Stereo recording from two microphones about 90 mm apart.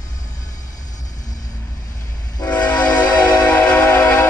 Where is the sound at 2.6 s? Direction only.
15° left (ahead or behind).